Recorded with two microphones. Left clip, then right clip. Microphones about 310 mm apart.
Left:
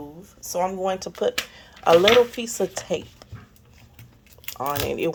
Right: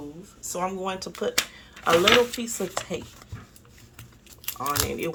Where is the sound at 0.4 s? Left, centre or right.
Centre.